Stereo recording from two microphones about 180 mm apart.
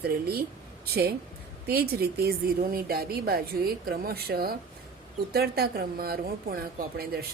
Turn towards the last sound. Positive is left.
turn(degrees=-55)  # may be behind; listen again after turning